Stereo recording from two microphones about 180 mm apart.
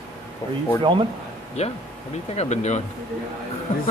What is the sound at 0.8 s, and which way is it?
Speech, 30° right (ahead or behind).